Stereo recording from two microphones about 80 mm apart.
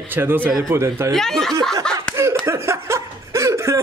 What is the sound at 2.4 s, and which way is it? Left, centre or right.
Chuckle, right.